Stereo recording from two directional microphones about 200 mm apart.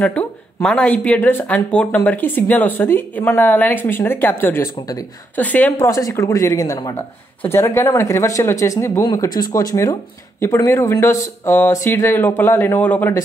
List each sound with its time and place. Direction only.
0.0 s speech: 5° left (ahead or behind)